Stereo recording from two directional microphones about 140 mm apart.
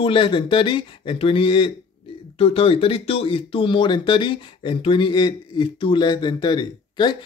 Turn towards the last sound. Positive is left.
turn(degrees=30)  # may be behind; listen again after turning